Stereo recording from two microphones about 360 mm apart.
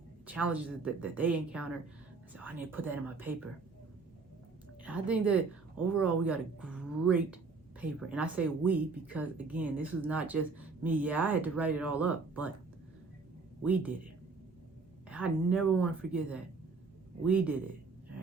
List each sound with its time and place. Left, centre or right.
0.3 s speech: centre
4.8 s a woman's voice: centre
13.7 s speech: centre
15.1 s speech: centre